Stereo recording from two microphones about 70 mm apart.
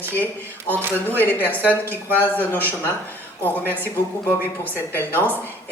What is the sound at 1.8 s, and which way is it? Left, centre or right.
Speech, right.